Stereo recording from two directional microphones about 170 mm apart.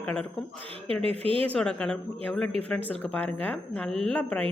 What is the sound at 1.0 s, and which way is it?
Speech, 35° right (ahead or behind).